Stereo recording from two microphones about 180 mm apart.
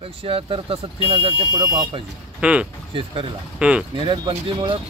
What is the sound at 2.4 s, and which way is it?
Speech, 5° right (ahead or behind).